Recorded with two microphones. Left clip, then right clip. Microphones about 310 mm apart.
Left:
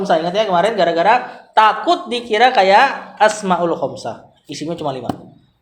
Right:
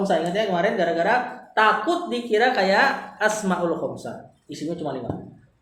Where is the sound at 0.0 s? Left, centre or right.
Left.